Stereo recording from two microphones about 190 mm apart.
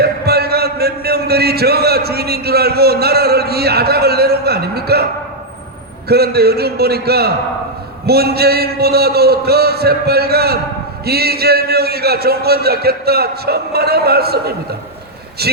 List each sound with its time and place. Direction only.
0.0 s speech: 55° right (ahead or behind)
6.1 s speech: 55° right (ahead or behind)